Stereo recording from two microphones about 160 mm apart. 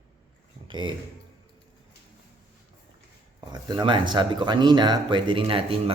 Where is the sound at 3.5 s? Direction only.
25° right (ahead or behind).